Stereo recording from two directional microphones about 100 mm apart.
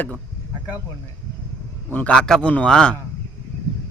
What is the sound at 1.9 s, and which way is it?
Speech, 15° left (ahead or behind).